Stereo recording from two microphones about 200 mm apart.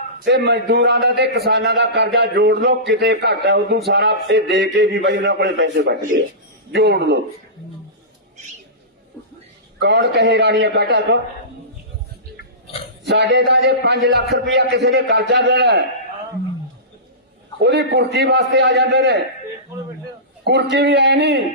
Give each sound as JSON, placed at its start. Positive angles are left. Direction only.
{"t": 0.3, "sound": "a man's voice", "side_deg": -60}
{"t": 9.7, "sound": "a man's voice", "side_deg": -60}
{"t": 13.1, "sound": "a man's voice", "side_deg": -60}
{"t": 17.6, "sound": "a man's voice", "side_deg": -60}
{"t": 20.4, "sound": "a man's voice", "side_deg": -55}